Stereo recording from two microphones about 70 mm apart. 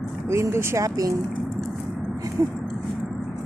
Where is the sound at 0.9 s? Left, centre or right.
Right.